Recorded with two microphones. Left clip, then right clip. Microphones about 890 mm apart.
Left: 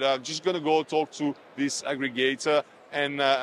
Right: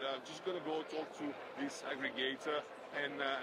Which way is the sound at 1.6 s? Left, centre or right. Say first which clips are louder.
Left 13 dB; left.